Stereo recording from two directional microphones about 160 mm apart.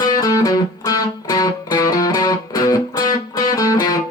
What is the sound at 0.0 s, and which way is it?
Music, 20° left (ahead or behind).